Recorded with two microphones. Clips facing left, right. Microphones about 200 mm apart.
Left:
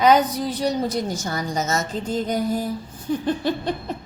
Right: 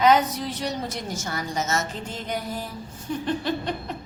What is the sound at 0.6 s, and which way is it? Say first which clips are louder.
A woman's voice: left 7 dB; 35° left (ahead or behind).